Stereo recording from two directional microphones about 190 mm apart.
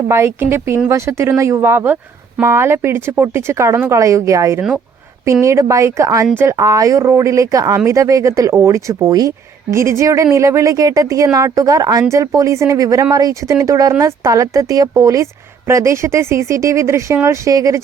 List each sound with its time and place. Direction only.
0.1 s speech: 15° right (ahead or behind)